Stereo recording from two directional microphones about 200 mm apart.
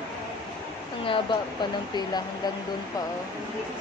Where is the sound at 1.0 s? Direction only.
25° left (ahead or behind).